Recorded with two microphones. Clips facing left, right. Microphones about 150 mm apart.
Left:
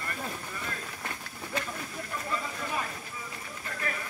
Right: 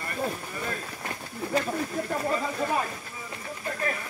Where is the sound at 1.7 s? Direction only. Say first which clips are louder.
Right 9 dB; 55° right (ahead or behind).